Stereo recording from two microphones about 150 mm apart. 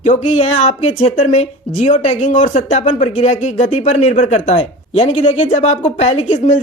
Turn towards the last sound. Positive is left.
turn(degrees=50)  # may be behind; listen again after turning